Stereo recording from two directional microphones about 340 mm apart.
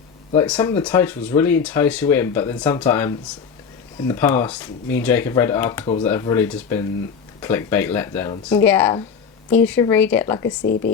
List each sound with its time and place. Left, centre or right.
0.3 s speech: centre
10.6 s speech: left